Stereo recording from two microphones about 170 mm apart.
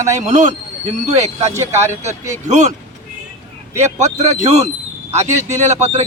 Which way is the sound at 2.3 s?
45° right (ahead or behind).